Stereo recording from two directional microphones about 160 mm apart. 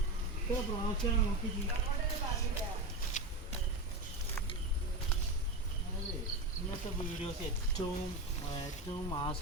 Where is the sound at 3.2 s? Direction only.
50° left (ahead or behind).